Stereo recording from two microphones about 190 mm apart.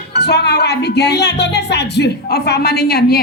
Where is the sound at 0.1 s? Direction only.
60° left (ahead or behind).